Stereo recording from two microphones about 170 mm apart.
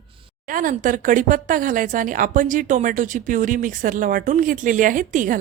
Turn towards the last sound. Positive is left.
turn(degrees=-50)  # may be behind; listen again after turning